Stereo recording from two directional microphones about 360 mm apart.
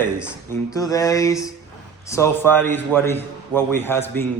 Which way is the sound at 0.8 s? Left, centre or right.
Centre.